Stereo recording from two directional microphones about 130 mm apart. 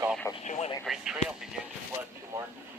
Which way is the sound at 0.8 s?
5° right (ahead or behind).